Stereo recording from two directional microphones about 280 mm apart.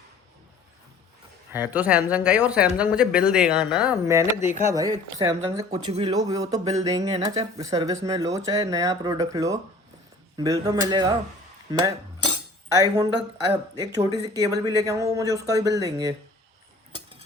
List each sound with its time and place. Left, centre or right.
1.5 s speech: centre
6.7 s speech: right
11.7 s cutlery: centre
13.5 s speech: centre
16.9 s a sound: centre